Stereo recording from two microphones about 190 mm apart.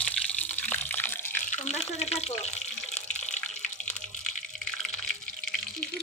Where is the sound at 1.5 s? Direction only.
35° left (ahead or behind).